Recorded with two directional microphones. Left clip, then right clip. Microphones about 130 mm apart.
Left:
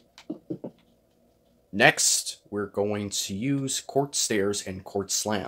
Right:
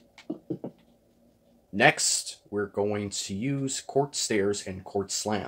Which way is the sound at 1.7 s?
25° left (ahead or behind).